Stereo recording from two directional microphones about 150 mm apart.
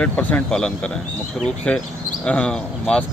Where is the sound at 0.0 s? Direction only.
10° left (ahead or behind).